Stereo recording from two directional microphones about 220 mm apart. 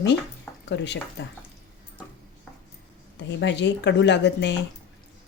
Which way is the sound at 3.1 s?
50° left (ahead or behind).